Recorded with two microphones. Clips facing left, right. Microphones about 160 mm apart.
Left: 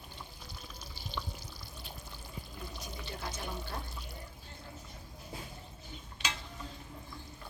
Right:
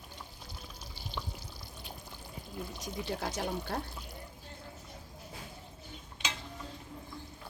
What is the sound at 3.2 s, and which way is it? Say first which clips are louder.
Speech: right 6 dB; 85° right.